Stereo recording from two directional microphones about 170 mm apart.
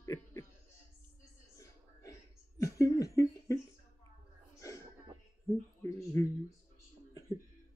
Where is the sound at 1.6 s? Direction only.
20° left (ahead or behind).